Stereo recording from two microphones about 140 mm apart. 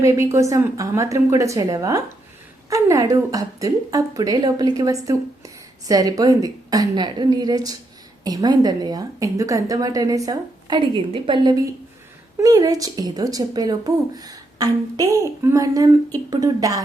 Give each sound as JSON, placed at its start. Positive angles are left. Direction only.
{"t": 0.0, "sound": "speech", "side_deg": -20}